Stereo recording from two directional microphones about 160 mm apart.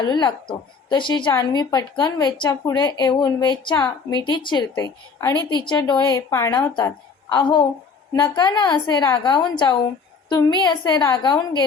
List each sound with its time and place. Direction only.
0.0 s a woman's voice: 25° left (ahead or behind)